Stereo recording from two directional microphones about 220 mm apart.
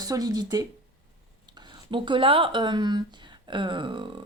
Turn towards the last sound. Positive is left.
turn(degrees=-20)  # may be behind; listen again after turning